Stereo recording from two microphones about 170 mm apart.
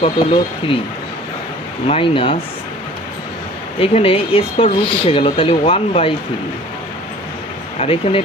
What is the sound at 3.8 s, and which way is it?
Speech, 35° left (ahead or behind).